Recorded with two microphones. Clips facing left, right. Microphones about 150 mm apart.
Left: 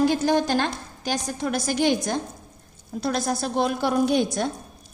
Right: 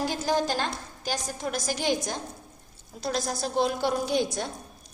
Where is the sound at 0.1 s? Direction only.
65° left (ahead or behind).